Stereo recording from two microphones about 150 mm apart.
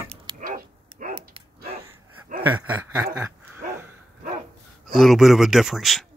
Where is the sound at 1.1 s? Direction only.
40° right (ahead or behind).